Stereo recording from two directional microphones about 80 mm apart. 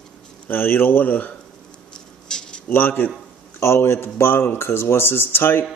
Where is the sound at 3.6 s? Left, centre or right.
Left.